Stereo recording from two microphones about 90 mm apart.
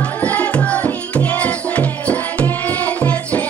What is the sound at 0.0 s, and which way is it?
Music, 15° left (ahead or behind).